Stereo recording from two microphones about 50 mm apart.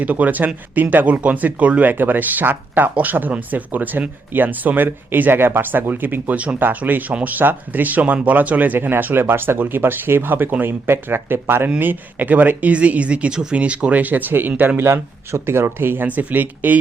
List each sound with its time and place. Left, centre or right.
0.0 s speech: right
6.6 s speech: right
14.8 s speech: right
16.0 s speech: right